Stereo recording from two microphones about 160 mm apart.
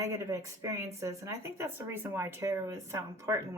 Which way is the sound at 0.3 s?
20° right (ahead or behind).